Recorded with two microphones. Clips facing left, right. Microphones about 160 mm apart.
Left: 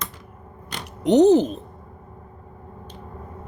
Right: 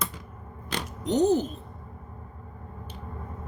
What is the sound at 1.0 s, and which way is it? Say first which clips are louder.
Speech: left 8 dB; 80° left.